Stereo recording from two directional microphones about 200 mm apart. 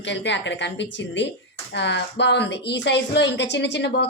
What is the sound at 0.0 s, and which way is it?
A woman's voice, 60° left (ahead or behind).